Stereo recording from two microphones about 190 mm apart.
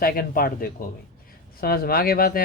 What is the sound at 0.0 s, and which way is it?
Speech, 50° left (ahead or behind).